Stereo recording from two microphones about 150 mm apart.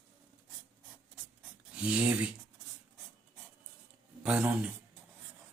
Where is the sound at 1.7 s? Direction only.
10° right (ahead or behind).